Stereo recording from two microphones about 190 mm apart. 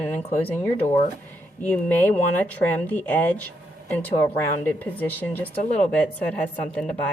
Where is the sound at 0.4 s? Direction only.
10° left (ahead or behind).